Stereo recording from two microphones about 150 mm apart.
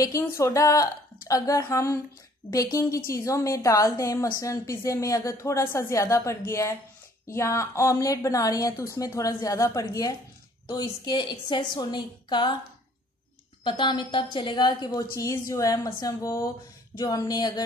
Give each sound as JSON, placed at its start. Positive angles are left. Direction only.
{"t": 0.0, "sound": "a woman's voice", "side_deg": 20}
{"t": 13.7, "sound": "a woman's voice", "side_deg": 35}